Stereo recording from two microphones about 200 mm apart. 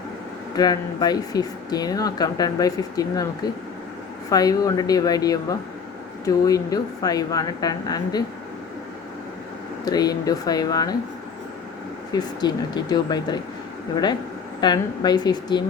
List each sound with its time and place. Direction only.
0.5 s speech: 20° left (ahead or behind)
4.3 s speech: 20° left (ahead or behind)
9.8 s speech: 20° left (ahead or behind)
12.1 s speech: 20° left (ahead or behind)